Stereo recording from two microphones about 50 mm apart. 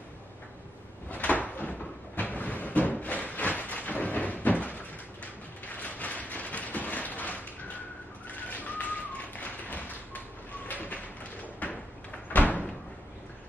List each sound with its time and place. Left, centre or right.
1.1 s cupboard open or close: left
5.8 s a sound: left
8.3 s whistling: left
9.3 s tap: left
10.7 s a sound: left
11.6 s door: left